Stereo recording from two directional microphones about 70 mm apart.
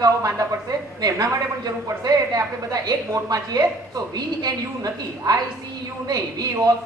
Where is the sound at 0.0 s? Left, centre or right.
Right.